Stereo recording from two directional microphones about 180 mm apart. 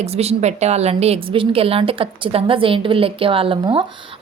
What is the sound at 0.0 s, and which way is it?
A woman's voice, 35° right (ahead or behind).